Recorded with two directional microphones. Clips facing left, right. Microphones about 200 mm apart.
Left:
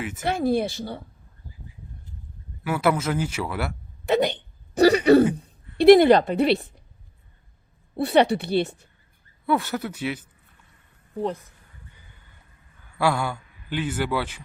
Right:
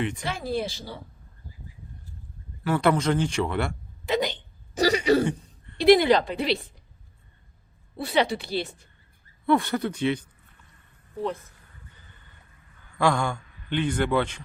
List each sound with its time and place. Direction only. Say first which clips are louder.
0.3 s speech: left 6 dB; 55° left (ahead or behind)
2.6 s speech: right 1 dB; 10° left (ahead or behind)
4.0 s speech: left 4 dB; 60° left (ahead or behind)
7.9 s speech: left 5 dB; 55° left (ahead or behind)
9.5 s speech: right 2 dB; 5° left (ahead or behind)
12.9 s a man's voice: even; 5° left (ahead or behind)